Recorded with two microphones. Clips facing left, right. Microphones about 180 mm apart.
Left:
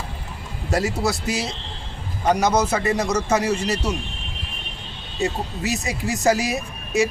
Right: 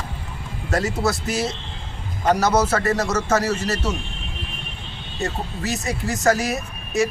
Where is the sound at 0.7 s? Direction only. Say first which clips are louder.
Even; centre (ahead or behind).